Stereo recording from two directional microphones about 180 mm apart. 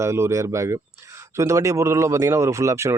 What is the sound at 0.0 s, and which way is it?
Speech, 15° right (ahead or behind).